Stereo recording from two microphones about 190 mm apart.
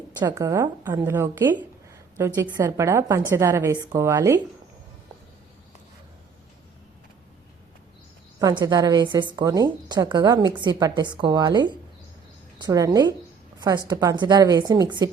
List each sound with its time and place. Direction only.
0.2 s a woman's voice: 20° right (ahead or behind)
8.4 s a woman's voice: 20° right (ahead or behind)